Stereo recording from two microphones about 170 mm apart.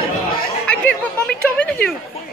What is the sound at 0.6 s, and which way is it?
Speech, 5° left (ahead or behind).